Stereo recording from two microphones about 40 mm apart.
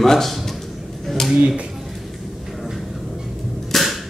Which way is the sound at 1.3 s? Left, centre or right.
Right.